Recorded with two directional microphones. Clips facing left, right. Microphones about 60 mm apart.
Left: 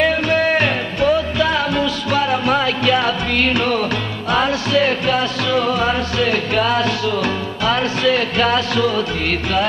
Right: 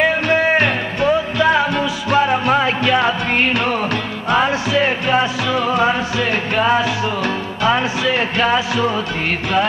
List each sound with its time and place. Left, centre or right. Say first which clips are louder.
0.0 s music: right 1 dB; centre